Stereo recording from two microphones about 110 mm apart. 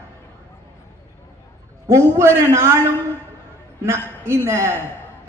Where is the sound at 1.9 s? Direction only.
25° right (ahead or behind).